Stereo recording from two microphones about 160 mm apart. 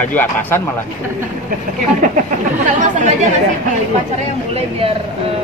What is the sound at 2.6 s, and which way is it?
Speech, 50° right (ahead or behind).